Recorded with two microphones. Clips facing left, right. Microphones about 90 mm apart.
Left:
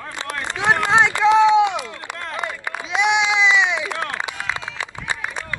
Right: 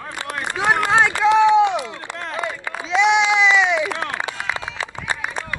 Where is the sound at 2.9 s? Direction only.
15° left (ahead or behind).